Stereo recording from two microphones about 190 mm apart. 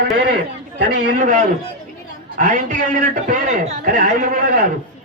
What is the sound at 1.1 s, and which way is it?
A woman's voice, 40° right (ahead or behind).